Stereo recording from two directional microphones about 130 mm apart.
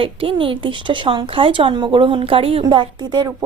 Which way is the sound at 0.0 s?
45° right (ahead or behind).